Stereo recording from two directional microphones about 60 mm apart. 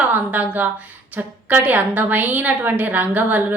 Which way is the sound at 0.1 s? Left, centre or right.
Right.